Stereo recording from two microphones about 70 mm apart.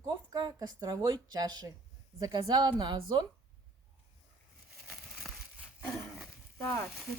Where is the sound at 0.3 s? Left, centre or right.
Right.